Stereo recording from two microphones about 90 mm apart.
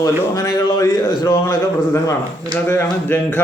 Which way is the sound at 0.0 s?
35° left (ahead or behind).